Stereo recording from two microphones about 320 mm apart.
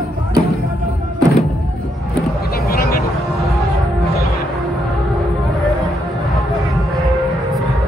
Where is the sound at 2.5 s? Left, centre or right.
Left.